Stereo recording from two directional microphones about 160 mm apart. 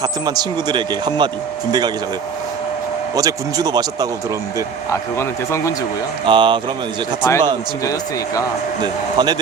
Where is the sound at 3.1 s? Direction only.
20° right (ahead or behind).